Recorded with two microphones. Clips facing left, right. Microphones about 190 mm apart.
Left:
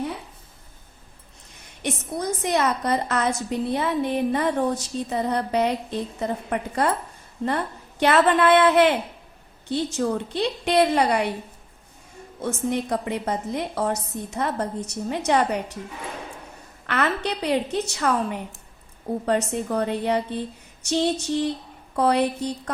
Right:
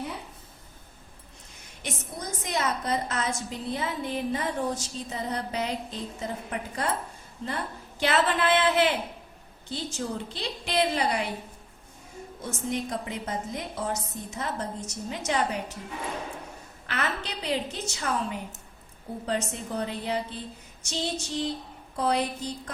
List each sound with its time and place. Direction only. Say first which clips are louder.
1.8 s a woman's voice: left 9 dB; 60° left (ahead or behind)
12.4 s a woman's voice: left 6 dB; 60° left (ahead or behind)
16.8 s a woman's voice: left 7 dB; 60° left (ahead or behind)